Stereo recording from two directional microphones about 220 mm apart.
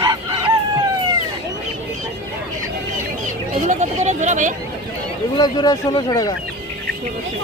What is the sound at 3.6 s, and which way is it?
Chatter, 30° right (ahead or behind).